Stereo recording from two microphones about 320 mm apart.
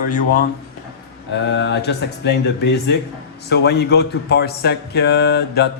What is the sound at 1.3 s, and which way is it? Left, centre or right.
Speech, left.